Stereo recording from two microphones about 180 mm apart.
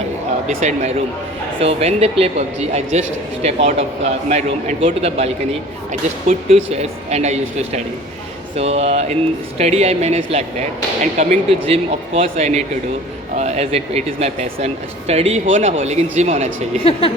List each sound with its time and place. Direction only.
0.4 s speech: 40° right (ahead or behind)